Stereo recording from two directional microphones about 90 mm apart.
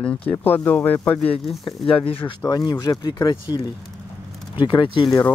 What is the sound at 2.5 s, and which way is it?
Speech, 45° left (ahead or behind).